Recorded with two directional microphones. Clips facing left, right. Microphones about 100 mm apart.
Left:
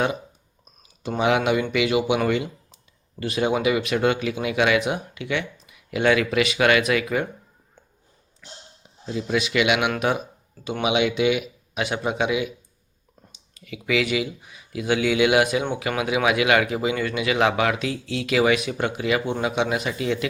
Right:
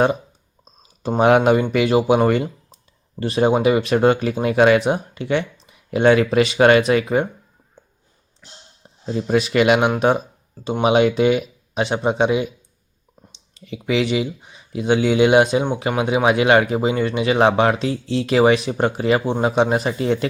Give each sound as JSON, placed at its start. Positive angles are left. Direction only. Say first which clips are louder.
{"t": 1.2, "sound": "speech", "louder": "right 6 dB", "side_deg": -40}
{"t": 3.2, "sound": "speech", "louder": "right 6 dB", "side_deg": -35}
{"t": 9.1, "sound": "speech", "louder": "right 5 dB", "side_deg": -40}